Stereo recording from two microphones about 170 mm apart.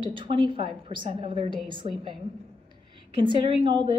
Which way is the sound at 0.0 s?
30° right (ahead or behind).